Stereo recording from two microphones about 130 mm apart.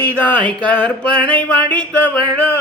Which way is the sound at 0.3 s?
10° left (ahead or behind).